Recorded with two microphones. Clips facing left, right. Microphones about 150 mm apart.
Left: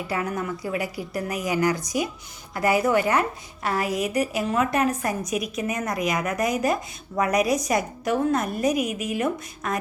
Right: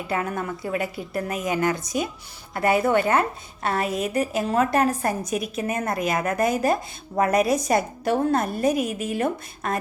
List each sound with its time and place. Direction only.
0.1 s speech: 25° right (ahead or behind)